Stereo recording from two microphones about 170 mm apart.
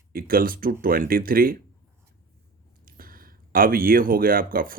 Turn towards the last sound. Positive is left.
turn(degrees=-55)  # may be behind; listen again after turning